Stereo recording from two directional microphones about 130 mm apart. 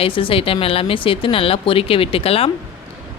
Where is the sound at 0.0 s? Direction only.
45° left (ahead or behind).